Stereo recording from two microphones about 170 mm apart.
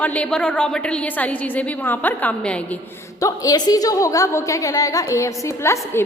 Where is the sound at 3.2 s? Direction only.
20° left (ahead or behind).